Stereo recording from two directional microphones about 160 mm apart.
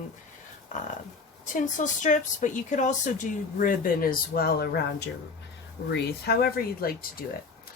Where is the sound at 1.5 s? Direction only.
50° left (ahead or behind); by 7.3 s 75° left (ahead or behind).